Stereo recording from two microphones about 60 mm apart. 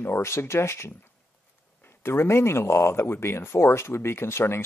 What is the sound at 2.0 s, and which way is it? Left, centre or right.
Speech, left.